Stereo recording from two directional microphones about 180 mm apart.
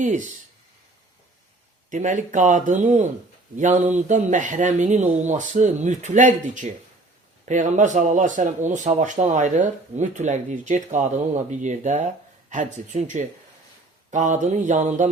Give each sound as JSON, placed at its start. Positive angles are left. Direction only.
{"t": 1.9, "sound": "speech", "side_deg": -45}